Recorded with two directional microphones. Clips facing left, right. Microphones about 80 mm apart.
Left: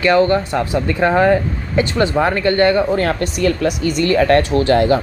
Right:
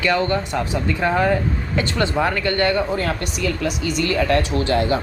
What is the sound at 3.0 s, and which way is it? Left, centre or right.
Speech, left.